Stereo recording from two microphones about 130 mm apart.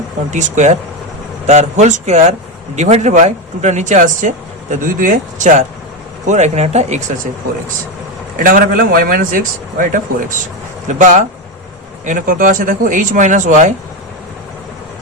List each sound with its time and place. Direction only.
0.3 s speech: 65° right (ahead or behind)
4.7 s speech: 80° right; by 7.0 s 60° right (ahead or behind)
8.4 s a man's voice: 90° right
10.8 s speech: 70° right (ahead or behind)
12.0 s speech: 90° right; by 13.7 s 70° right (ahead or behind)